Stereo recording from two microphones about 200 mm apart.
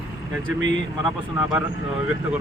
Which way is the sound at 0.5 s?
65° right (ahead or behind).